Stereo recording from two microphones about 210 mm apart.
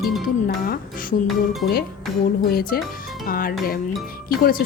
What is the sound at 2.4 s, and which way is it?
Speech, 45° left (ahead or behind).